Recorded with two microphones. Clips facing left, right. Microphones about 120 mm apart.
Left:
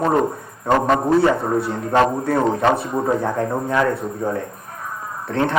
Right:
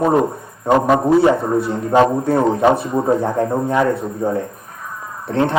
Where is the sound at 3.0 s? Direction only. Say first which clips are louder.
Right 3 dB; 25° right (ahead or behind).